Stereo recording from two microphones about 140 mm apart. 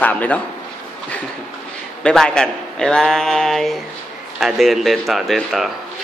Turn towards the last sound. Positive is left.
turn(degrees=0)  # may be behind; listen again after turning